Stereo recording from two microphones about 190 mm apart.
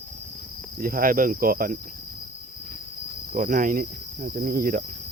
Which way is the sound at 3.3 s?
45° right (ahead or behind).